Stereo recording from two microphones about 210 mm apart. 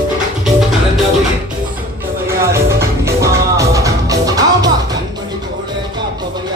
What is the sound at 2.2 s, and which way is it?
Music, 10° right (ahead or behind).